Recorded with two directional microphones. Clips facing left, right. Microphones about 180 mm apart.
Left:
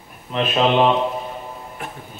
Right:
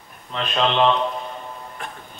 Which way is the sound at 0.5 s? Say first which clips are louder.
Left 2 dB; 10° left (ahead or behind).